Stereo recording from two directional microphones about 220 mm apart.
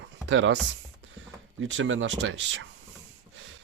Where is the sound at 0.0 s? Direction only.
55° right (ahead or behind).